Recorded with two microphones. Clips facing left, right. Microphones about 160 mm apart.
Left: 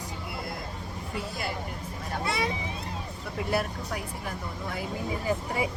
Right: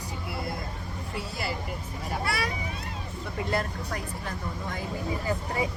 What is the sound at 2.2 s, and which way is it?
Speech, 25° left (ahead or behind).